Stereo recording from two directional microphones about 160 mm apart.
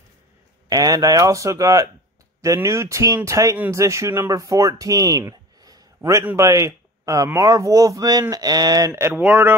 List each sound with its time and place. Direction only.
0.7 s speech: 20° right (ahead or behind)